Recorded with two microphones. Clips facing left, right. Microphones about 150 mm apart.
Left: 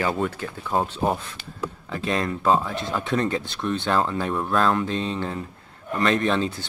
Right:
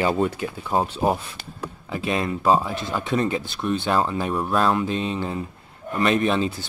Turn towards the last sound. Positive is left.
turn(degrees=-10)  # may be behind; listen again after turning